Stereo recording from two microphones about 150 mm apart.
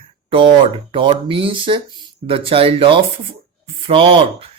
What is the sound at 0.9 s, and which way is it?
Speech, 35° right (ahead or behind).